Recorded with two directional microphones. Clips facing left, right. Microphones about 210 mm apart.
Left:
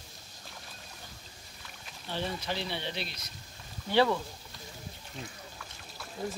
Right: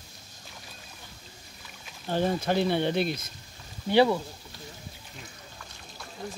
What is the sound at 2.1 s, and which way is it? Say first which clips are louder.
Speech: right 9 dB; 45° right (ahead or behind).